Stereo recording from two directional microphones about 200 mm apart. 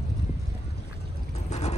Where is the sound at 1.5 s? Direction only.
35° left (ahead or behind).